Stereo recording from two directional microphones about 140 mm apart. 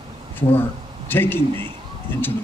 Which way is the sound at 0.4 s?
15° left (ahead or behind).